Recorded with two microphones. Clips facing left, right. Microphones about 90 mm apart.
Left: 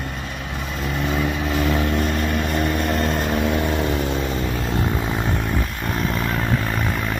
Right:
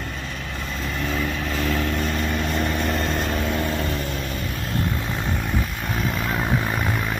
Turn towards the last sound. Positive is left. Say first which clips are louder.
# left 1 dB
turn(degrees=-5)  # may be behind; listen again after turning